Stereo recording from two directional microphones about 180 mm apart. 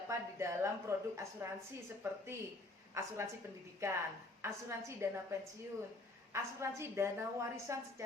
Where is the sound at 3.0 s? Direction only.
15° right (ahead or behind).